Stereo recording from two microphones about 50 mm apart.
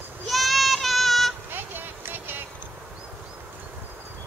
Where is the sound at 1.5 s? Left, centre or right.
Right.